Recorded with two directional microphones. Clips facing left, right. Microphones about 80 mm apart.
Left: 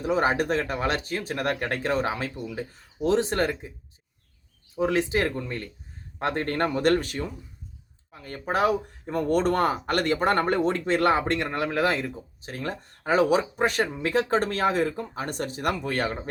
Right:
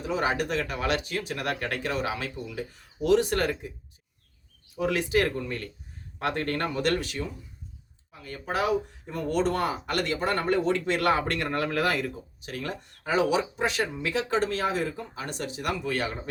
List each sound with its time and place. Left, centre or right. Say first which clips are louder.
0.0 s speech: left 4 dB; left
4.7 s speech: left 2 dB; left